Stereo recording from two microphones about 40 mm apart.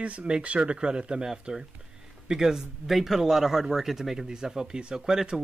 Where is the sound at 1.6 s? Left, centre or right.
Centre.